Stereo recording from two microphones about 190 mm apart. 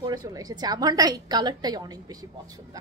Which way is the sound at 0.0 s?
20° right (ahead or behind).